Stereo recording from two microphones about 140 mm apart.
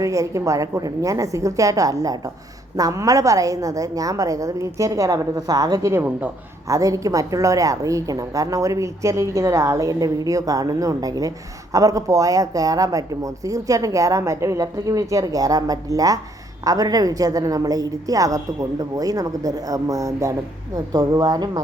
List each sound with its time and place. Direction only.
0.0 s a woman's voice: 25° right (ahead or behind)
6.7 s a woman's voice: 25° right (ahead or behind)